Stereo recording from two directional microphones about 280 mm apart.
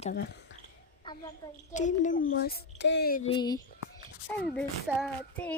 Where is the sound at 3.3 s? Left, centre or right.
Centre.